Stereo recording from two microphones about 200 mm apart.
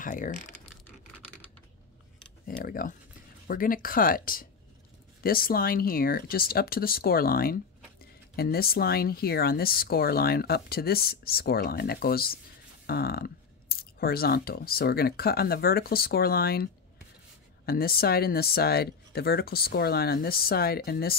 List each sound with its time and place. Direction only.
0.0 s speech: 45° left (ahead or behind)
2.4 s speech: 45° left (ahead or behind)
17.6 s speech: 50° left (ahead or behind)